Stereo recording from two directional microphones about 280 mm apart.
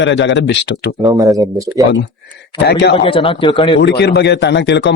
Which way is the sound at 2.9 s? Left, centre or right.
Centre.